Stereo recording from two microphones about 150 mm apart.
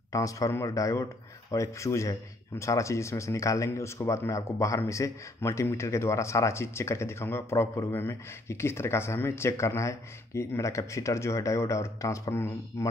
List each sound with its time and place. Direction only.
0.1 s speech: 20° left (ahead or behind)